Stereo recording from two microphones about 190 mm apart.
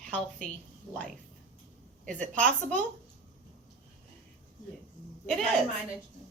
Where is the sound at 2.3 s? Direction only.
5° left (ahead or behind).